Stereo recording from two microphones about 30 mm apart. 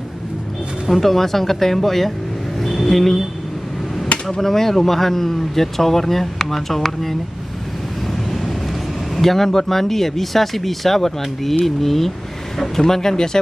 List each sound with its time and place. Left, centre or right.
0.8 s speech: centre
4.3 s speech: centre
8.1 s vehicle: centre
9.1 s speech: centre